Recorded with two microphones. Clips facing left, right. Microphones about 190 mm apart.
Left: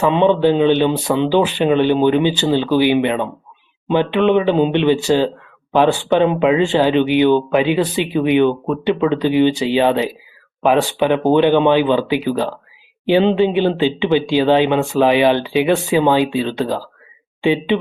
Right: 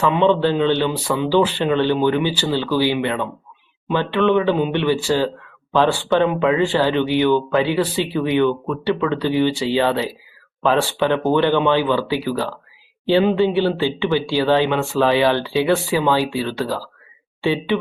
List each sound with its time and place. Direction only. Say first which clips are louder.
0.0 s speech: left 3 dB; 15° left (ahead or behind)